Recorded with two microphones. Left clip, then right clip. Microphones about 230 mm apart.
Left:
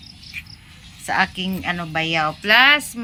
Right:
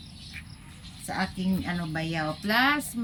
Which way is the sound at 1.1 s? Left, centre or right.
Left.